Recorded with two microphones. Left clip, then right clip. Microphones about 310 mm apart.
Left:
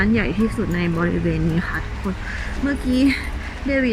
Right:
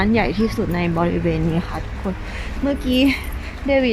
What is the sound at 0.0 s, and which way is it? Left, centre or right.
Speech, centre.